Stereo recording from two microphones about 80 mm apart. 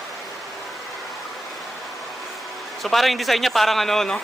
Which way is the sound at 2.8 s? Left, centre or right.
Centre.